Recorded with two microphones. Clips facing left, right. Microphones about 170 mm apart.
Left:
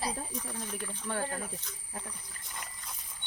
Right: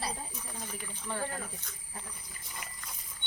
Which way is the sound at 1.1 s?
65° left (ahead or behind).